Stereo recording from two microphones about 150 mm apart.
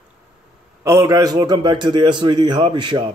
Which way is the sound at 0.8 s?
20° right (ahead or behind).